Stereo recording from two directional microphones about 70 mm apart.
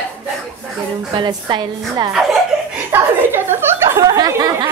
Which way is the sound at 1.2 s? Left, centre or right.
Right.